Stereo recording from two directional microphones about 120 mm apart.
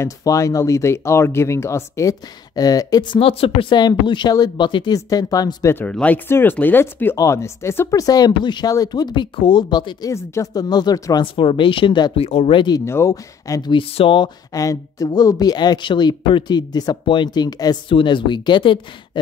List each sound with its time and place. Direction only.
0.0 s speech: 25° left (ahead or behind)
5.9 s speech: 10° left (ahead or behind); by 10.1 s 35° left (ahead or behind)
10.1 s speech: 25° left (ahead or behind); by 12.1 s 40° left (ahead or behind)
12.2 s speech: 55° left (ahead or behind); by 12.8 s 40° left (ahead or behind)
12.8 s speech: 25° left (ahead or behind); by 18.8 s 40° left (ahead or behind)